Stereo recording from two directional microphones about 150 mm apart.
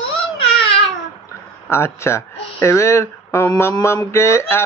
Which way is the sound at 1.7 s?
15° left (ahead or behind).